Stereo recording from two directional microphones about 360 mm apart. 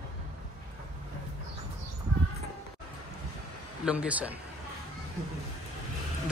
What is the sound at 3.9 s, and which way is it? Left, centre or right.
Speech, centre.